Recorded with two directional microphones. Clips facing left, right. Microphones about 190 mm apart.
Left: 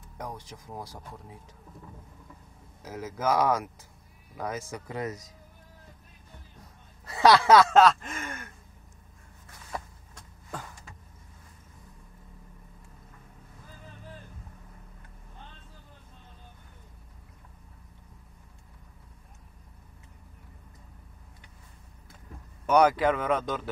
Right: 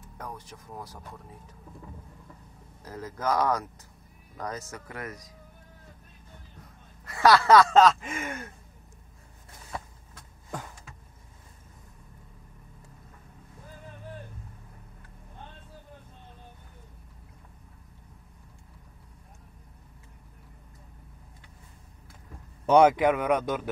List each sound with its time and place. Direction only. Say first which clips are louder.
0.5 s speech: left 1 dB; 15° left (ahead or behind)
2.8 s speech: left 2 dB; 10° left (ahead or behind)
7.1 s speech: even; 20° left (ahead or behind); by 8.4 s 10° right (ahead or behind)
22.7 s speech: right 3 dB; 25° right (ahead or behind)